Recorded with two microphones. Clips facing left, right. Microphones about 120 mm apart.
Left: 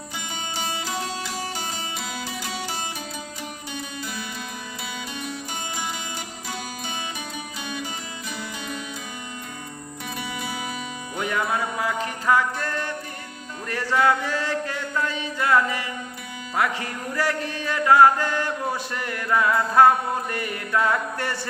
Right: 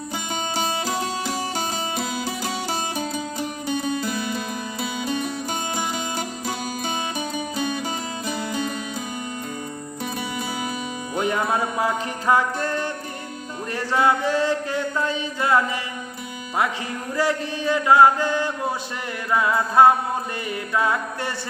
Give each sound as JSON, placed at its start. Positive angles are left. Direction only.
{"t": 0.5, "sound": "music", "side_deg": -35}
{"t": 3.8, "sound": "music", "side_deg": -45}
{"t": 11.2, "sound": "music", "side_deg": -25}
{"t": 13.7, "sound": "mantra", "side_deg": -20}
{"t": 17.2, "sound": "mantra", "side_deg": -20}
{"t": 20.3, "sound": "music", "side_deg": -20}